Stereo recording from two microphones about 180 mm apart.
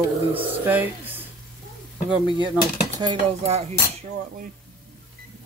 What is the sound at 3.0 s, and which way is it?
Speech, 30° right (ahead or behind).